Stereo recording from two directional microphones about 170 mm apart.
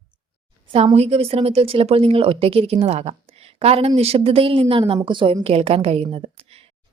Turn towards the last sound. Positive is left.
turn(degrees=-35)  # may be behind; listen again after turning